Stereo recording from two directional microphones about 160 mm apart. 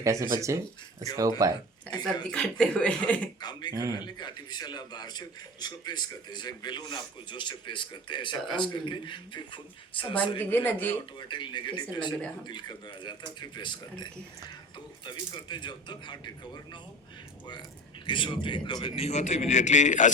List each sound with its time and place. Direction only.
0.0 s speech: 20° right (ahead or behind)
1.9 s a man's voice: 25° left (ahead or behind)
2.3 s speech: 5° left (ahead or behind)
3.7 s speech: 20° right (ahead or behind)
4.0 s a man's voice: 30° left (ahead or behind)
10.3 s speech: 10° left (ahead or behind)
11.2 s a man's voice: 30° left (ahead or behind)
15.0 s a man's voice: 30° left (ahead or behind)
18.0 s a man's voice: 30° left (ahead or behind); by 20.1 s 50° left (ahead or behind)